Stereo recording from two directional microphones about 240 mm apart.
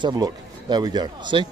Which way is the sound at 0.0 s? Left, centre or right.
Centre.